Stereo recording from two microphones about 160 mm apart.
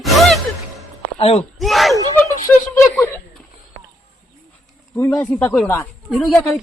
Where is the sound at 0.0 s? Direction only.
Centre (ahead or behind).